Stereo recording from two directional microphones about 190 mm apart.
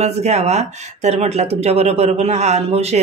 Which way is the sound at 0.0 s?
35° right (ahead or behind).